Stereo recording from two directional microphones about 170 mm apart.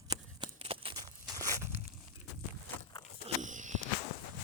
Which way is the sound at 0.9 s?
20° right (ahead or behind).